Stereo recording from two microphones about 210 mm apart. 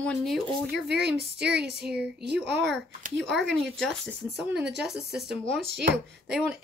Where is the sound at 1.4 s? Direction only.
5° right (ahead or behind).